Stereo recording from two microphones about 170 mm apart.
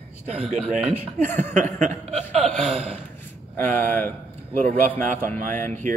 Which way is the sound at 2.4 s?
Centre (ahead or behind).